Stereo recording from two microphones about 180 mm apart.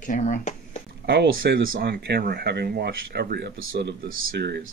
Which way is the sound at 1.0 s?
70° right (ahead or behind).